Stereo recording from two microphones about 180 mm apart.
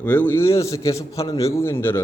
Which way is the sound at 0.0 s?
10° left (ahead or behind).